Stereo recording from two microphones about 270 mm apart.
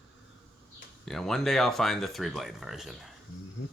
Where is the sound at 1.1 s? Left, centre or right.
Centre.